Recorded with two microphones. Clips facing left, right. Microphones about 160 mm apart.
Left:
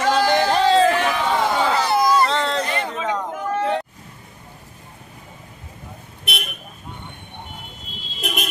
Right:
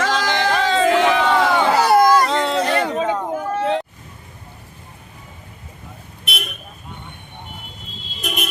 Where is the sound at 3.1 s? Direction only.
10° right (ahead or behind).